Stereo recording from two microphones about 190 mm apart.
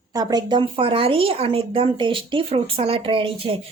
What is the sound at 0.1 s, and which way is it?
A woman's voice, 20° right (ahead or behind).